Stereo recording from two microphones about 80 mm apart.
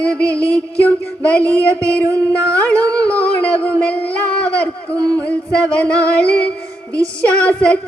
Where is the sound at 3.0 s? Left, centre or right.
Centre.